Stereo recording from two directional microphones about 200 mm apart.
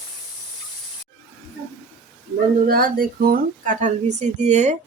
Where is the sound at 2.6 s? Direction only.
45° right (ahead or behind).